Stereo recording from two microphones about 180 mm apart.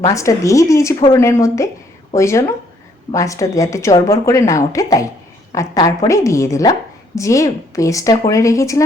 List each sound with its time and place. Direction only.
0.1 s a woman's voice: 15° left (ahead or behind)